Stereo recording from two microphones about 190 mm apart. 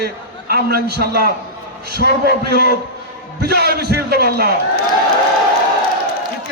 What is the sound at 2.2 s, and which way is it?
A man's voice, 55° right (ahead or behind).